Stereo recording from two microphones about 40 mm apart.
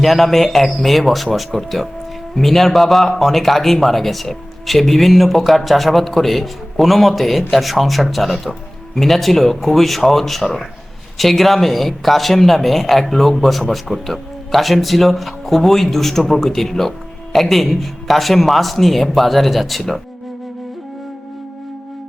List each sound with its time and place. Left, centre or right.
0.0 s speech: centre